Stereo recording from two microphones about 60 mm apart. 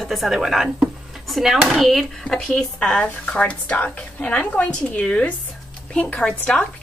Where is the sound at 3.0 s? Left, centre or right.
Left.